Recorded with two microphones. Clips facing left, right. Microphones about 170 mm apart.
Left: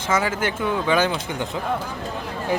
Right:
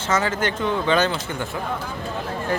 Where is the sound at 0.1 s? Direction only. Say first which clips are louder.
Even; 10° left (ahead or behind).